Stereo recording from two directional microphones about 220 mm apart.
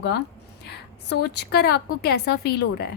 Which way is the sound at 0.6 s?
50° left (ahead or behind).